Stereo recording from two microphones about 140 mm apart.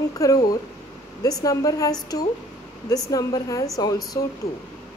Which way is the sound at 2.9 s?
25° left (ahead or behind).